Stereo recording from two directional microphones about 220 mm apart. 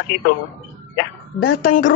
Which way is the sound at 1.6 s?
35° left (ahead or behind).